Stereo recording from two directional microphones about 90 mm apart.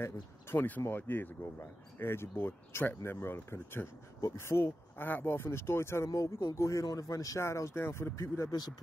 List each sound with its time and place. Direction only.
0.0 s speech: 25° left (ahead or behind)
6.0 s speech: 40° left (ahead or behind)
8.5 s speech: 50° left (ahead or behind)